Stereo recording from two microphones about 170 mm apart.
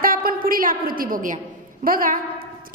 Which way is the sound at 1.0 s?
55° right (ahead or behind).